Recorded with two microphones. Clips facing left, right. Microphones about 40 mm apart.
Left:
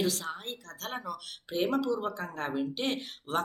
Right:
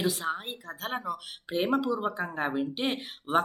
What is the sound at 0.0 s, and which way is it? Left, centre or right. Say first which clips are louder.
A woman's voice: right 2 dB; centre.